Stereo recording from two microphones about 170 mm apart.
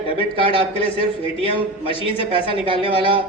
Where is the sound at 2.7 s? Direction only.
30° right (ahead or behind).